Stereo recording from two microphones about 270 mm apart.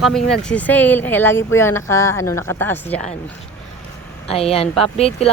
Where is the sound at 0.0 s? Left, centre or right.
Centre.